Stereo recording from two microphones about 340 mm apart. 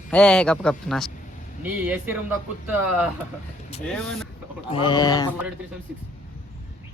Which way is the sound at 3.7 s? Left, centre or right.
Centre.